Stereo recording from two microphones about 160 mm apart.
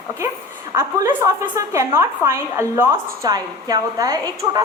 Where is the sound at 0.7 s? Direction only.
15° right (ahead or behind).